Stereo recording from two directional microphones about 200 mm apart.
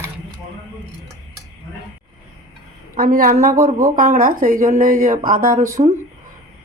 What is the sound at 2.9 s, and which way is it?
A woman's voice, 45° right (ahead or behind).